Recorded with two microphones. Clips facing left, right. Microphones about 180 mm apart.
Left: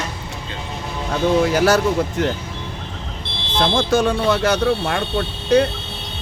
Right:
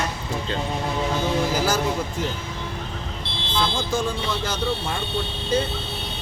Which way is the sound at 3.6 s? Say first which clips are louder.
Left 8 dB; 70° left (ahead or behind).